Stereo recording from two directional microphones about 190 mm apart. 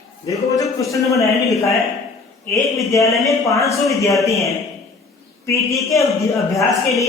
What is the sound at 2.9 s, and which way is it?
Speech, 15° left (ahead or behind).